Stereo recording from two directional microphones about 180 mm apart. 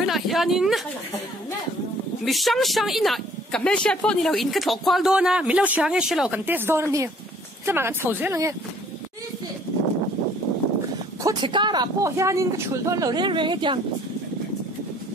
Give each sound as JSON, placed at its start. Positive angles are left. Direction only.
{"t": 0.0, "sound": "speech", "side_deg": 0}
{"t": 2.2, "sound": "speech", "side_deg": 0}
{"t": 11.2, "sound": "speech", "side_deg": -25}